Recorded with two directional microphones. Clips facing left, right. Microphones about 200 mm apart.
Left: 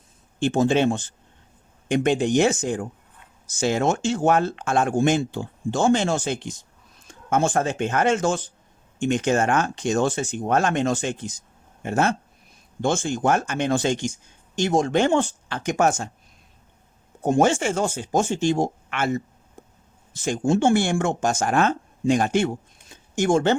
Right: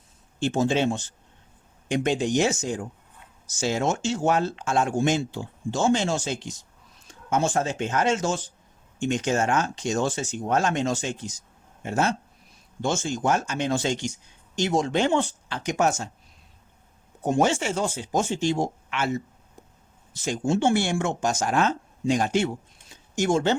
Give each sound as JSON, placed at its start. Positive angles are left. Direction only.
{"t": 0.3, "sound": "speech", "side_deg": 55}
{"t": 17.2, "sound": "speech", "side_deg": 50}
{"t": 19.6, "sound": "a sound", "side_deg": 50}
{"t": 20.1, "sound": "speech", "side_deg": 50}